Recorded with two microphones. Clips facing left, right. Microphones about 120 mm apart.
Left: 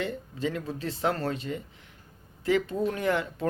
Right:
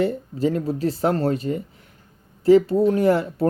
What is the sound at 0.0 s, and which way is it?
Speech, 40° right (ahead or behind).